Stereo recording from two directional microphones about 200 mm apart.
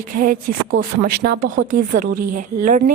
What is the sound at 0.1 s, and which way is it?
Speech, 45° right (ahead or behind).